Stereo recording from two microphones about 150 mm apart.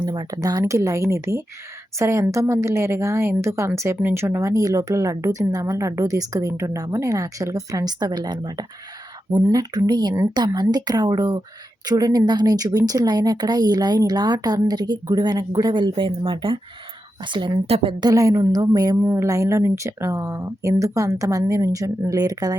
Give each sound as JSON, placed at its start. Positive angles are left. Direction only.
{"t": 0.0, "sound": "a woman's voice", "side_deg": -25}
{"t": 18.1, "sound": "a woman's voice", "side_deg": -20}